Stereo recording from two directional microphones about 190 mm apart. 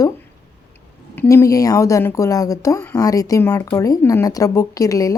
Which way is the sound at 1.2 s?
15° left (ahead or behind).